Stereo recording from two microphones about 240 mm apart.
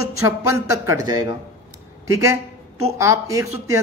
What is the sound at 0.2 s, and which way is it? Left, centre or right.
A man's voice, centre.